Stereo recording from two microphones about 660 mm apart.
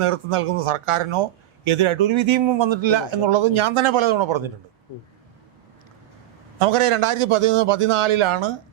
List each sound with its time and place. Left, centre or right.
0.0 s speech: right
6.6 s speech: right